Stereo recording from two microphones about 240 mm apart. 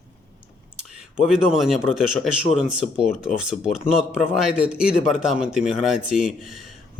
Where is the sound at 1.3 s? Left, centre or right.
Centre.